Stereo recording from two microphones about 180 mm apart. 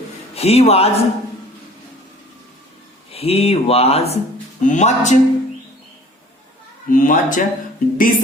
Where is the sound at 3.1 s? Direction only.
35° left (ahead or behind).